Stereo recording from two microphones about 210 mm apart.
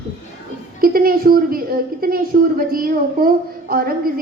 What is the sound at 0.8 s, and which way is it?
A woman's voice, 45° right (ahead or behind).